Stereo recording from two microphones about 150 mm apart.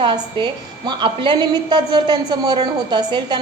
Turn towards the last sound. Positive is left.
turn(degrees=-30)  # may be behind; listen again after turning